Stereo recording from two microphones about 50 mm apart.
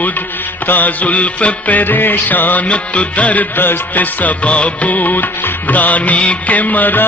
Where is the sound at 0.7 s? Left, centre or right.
Left.